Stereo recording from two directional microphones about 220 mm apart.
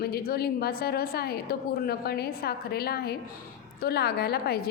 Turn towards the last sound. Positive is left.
turn(degrees=45)  # may be behind; listen again after turning